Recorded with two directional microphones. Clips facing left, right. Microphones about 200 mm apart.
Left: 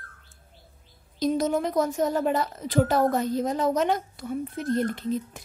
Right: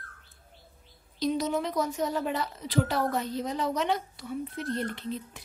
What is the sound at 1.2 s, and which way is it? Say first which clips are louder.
A woman's voice: left 4 dB; 45° left (ahead or behind).